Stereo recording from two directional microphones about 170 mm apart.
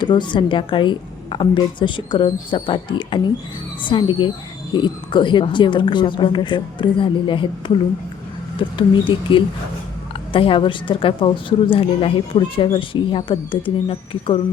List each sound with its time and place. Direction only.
0.0 s a woman's voice: 30° left (ahead or behind)